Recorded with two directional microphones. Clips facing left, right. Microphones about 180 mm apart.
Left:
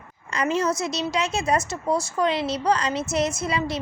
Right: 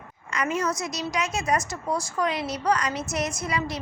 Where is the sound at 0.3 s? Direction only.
30° left (ahead or behind).